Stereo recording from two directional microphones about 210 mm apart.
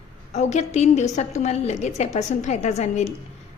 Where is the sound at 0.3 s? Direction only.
35° left (ahead or behind).